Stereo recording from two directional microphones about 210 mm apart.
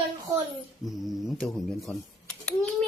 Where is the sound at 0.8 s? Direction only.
Centre (ahead or behind).